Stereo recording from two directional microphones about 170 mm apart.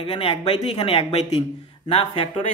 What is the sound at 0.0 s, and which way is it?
Speech, 30° left (ahead or behind).